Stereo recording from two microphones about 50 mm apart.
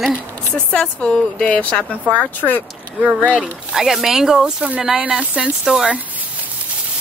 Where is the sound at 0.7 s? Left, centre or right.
Centre.